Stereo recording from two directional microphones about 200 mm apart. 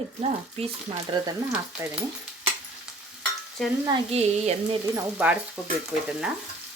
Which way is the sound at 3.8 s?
25° right (ahead or behind).